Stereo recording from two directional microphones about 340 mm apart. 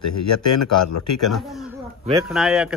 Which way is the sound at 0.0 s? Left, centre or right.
Left.